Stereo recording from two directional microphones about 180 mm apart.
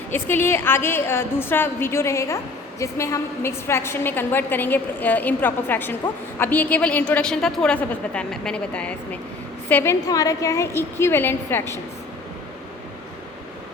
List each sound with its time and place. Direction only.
0.1 s a woman's voice: 10° left (ahead or behind)